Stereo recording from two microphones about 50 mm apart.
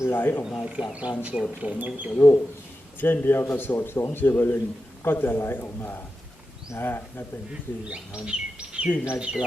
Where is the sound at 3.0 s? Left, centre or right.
Left.